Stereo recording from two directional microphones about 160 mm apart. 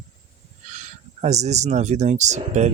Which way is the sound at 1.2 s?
45° right (ahead or behind).